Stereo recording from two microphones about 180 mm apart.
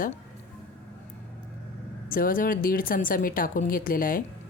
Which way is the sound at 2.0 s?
50° left (ahead or behind).